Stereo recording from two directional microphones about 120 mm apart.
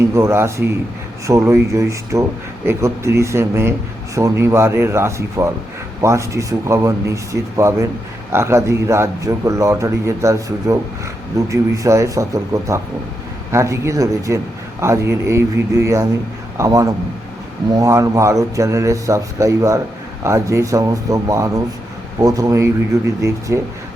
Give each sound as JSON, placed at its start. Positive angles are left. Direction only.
{"t": 0.1, "sound": "a man's voice", "side_deg": -25}